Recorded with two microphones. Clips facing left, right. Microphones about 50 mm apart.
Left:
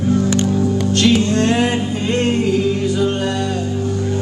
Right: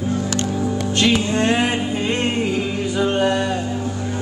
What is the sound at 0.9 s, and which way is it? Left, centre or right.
Music, centre.